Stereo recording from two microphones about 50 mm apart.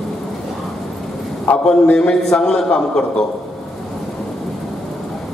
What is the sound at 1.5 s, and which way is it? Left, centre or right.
Speech, left.